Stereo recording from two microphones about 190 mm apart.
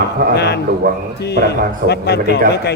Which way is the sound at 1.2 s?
60° left (ahead or behind).